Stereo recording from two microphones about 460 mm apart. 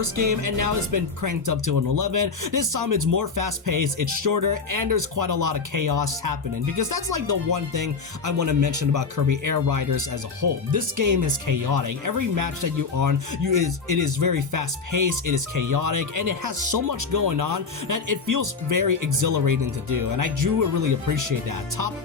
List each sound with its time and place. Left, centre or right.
0.0 s speech: right